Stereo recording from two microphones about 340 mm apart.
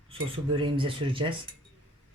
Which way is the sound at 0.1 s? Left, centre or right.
Centre.